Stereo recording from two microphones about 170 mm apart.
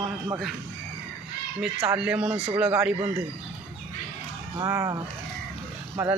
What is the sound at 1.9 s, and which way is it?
A man's voice, 5° right (ahead or behind).